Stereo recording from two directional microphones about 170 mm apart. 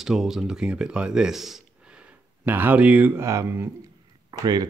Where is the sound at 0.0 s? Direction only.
Centre (ahead or behind).